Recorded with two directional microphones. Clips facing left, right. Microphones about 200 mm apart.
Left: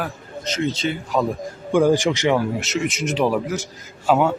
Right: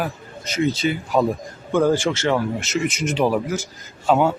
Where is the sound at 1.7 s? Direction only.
10° left (ahead or behind).